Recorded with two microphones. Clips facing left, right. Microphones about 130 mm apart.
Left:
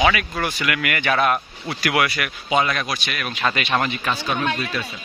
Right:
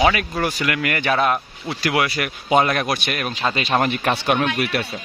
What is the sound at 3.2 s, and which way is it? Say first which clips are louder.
Speech: right 1 dB; 35° right (ahead or behind).